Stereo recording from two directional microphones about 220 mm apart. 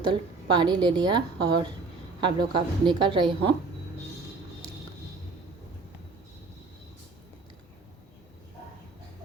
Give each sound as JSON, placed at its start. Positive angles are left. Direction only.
{"t": 0.1, "sound": "a woman's voice", "side_deg": -20}